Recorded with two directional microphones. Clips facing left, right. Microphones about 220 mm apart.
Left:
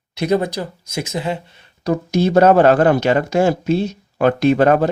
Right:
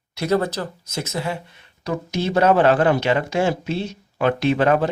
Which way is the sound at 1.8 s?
40° left (ahead or behind).